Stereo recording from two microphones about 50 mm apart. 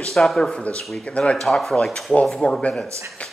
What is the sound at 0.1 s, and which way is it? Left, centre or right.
Speech, centre.